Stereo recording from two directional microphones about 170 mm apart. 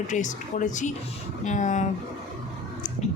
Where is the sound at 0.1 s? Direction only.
45° left (ahead or behind).